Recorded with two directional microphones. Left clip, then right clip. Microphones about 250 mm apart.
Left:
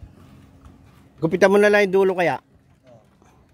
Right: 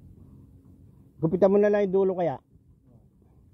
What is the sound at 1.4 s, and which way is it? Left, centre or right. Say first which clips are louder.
A man's voice: left 6 dB; centre.